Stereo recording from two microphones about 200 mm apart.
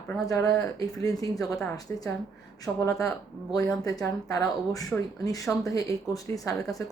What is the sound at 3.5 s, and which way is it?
Speech, 15° left (ahead or behind).